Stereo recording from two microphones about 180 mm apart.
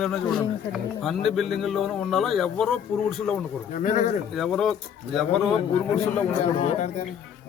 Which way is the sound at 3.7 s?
45° left (ahead or behind).